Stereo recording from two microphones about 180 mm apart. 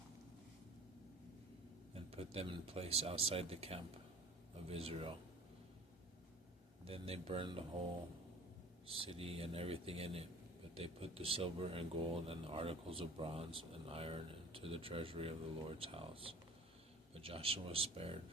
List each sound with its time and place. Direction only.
1.9 s speech: 35° right (ahead or behind)
6.8 s speech: 30° right (ahead or behind)
9.0 s speech: 35° right (ahead or behind)